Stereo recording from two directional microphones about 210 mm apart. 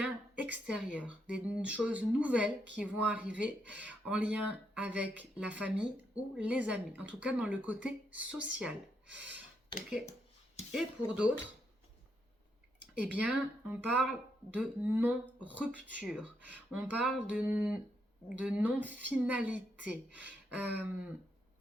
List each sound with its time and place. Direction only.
0.0 s a sound: 5° right (ahead or behind)
0.9 s speech: 5° right (ahead or behind)
9.7 s speech: 25° left (ahead or behind)
10.7 s speech: 5° right (ahead or behind)
13.0 s speech: 5° right (ahead or behind)